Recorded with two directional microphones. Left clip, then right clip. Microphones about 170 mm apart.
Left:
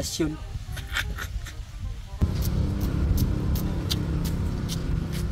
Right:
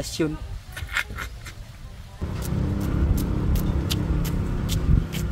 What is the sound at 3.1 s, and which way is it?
Vehicle, 10° right (ahead or behind).